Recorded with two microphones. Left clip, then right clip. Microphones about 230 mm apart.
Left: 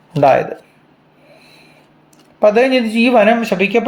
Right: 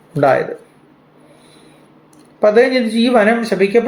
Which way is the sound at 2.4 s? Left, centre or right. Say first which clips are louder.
Even; left.